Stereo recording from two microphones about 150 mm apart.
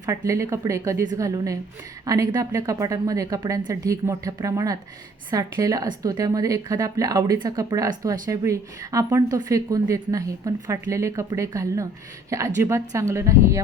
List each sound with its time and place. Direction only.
0.3 s a woman's voice: 20° right (ahead or behind)